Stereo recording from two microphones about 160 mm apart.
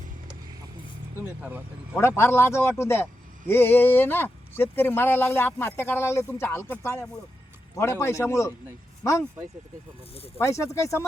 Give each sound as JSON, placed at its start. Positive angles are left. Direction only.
{"t": 1.2, "sound": "speech", "side_deg": -10}
{"t": 2.0, "sound": "a man's voice", "side_deg": 15}
{"t": 10.3, "sound": "a man's voice", "side_deg": 15}